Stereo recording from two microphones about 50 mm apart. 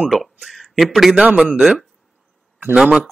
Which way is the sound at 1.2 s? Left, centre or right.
Right.